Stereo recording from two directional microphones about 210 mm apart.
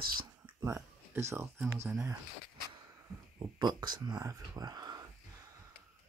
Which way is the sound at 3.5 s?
20° right (ahead or behind).